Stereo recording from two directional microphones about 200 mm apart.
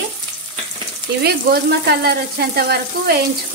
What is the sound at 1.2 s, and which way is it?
Speech, 55° right (ahead or behind).